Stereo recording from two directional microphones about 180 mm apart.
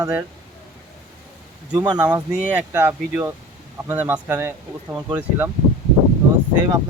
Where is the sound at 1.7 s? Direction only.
20° right (ahead or behind).